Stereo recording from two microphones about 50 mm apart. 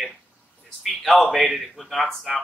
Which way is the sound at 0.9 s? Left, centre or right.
Centre.